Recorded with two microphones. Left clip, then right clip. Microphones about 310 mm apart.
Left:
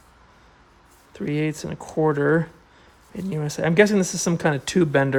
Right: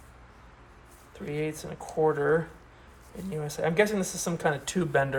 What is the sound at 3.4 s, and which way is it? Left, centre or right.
Speech, left.